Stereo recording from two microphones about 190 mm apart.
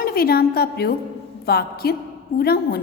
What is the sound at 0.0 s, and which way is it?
A woman's voice, 55° left (ahead or behind).